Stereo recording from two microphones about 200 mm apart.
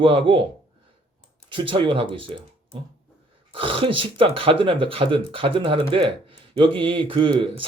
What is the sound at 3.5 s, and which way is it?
Speech, 25° right (ahead or behind).